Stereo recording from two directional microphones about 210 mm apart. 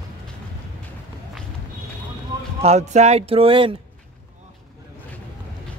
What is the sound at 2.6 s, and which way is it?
Speech, 30° right (ahead or behind).